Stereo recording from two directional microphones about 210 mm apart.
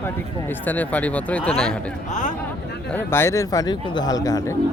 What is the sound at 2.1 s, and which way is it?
Speech, 35° left (ahead or behind).